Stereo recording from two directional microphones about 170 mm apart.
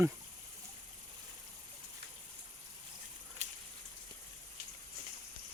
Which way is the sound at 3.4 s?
40° right (ahead or behind).